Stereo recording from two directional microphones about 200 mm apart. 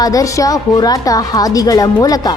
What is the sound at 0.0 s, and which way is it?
Speech, 15° left (ahead or behind).